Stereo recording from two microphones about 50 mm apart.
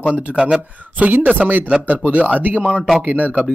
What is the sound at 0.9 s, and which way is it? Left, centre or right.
Speech, right.